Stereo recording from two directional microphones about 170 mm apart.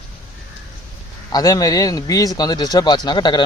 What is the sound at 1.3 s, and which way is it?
A man's voice, 20° left (ahead or behind).